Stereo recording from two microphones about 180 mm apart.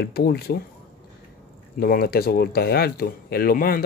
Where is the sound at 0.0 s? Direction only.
60° left (ahead or behind).